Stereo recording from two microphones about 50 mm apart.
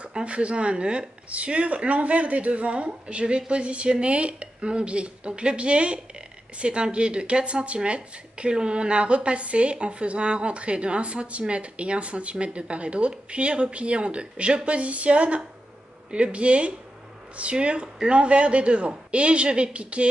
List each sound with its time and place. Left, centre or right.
0.0 s speech: right